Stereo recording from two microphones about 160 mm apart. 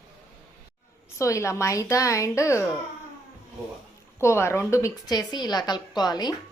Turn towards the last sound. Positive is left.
turn(degrees=25)  # may be behind; listen again after turning